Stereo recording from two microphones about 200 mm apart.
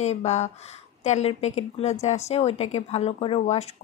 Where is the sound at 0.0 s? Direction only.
35° left (ahead or behind).